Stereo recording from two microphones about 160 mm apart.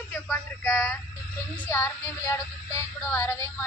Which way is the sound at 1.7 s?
15° left (ahead or behind).